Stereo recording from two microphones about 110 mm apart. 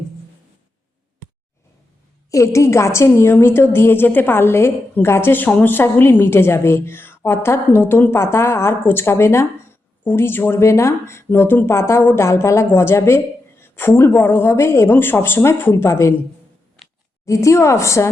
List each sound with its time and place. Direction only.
2.3 s a woman's voice: 30° left (ahead or behind)
17.2 s a woman's voice: 30° left (ahead or behind)